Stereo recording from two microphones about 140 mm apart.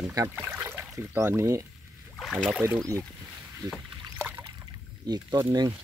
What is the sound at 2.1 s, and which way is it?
Boat, centre (ahead or behind).